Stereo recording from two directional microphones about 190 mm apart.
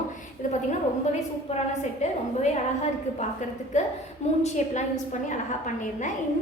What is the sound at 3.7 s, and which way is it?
A woman's voice, 40° left (ahead or behind).